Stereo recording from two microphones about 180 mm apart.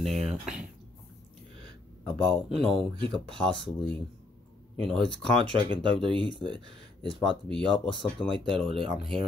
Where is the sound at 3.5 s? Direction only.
30° left (ahead or behind).